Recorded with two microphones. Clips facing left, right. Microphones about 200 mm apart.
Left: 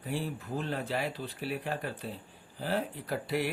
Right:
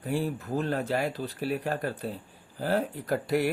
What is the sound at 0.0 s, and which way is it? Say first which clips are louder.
Speech: right 6 dB; 45° right (ahead or behind).